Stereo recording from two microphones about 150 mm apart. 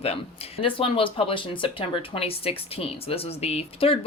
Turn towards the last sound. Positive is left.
turn(degrees=40)  # may be behind; listen again after turning